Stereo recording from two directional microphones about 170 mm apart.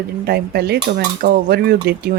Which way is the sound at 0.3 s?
65° right (ahead or behind).